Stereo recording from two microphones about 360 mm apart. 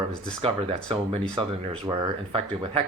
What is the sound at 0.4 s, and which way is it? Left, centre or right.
Speech, centre.